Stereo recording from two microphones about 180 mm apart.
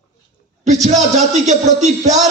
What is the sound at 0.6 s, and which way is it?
A man's voice, 40° right (ahead or behind).